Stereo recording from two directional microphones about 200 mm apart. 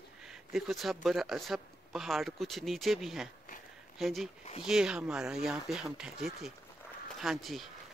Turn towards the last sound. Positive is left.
turn(degrees=0)  # may be behind; listen again after turning